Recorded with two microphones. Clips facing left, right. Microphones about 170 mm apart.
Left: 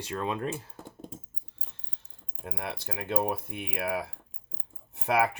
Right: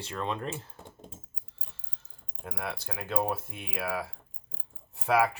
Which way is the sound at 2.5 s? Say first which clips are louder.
Even; 25° left (ahead or behind).